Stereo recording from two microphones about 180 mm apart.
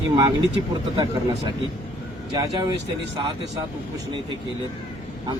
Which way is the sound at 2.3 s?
20° right (ahead or behind).